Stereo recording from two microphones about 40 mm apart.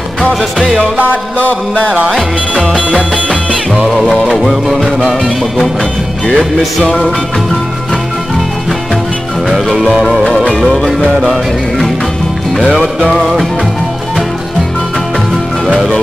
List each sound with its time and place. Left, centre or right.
0.2 s music: centre
1.4 s music: left
2.5 s music: left
3.7 s music: centre
10.5 s music: centre
12.5 s music: centre